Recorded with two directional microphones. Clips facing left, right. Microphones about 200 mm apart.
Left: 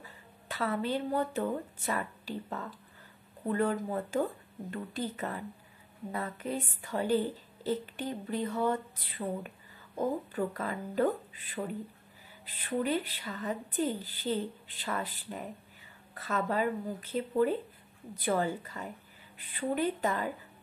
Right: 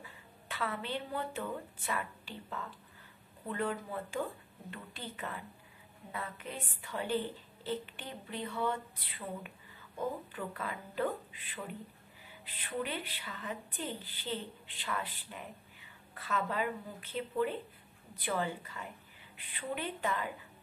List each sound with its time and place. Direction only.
0.0 s a woman's voice: 40° left (ahead or behind)